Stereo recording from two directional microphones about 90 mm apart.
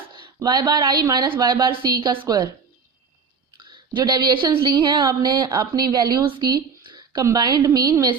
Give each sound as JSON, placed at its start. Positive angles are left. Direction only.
{"t": 0.4, "sound": "a woman's voice", "side_deg": -50}
{"t": 1.7, "sound": "a woman's voice", "side_deg": -60}
{"t": 3.6, "sound": "a woman's voice", "side_deg": -55}
{"t": 6.2, "sound": "a woman's voice", "side_deg": -70}
{"t": 6.5, "sound": "a sound", "side_deg": -60}
{"t": 7.3, "sound": "a woman's voice", "side_deg": -50}